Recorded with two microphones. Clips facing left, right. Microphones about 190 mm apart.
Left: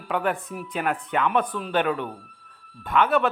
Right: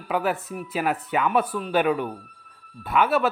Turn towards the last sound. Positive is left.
turn(degrees=-5)  # may be behind; listen again after turning